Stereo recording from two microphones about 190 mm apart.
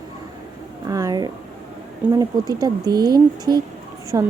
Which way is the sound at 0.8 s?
20° right (ahead or behind).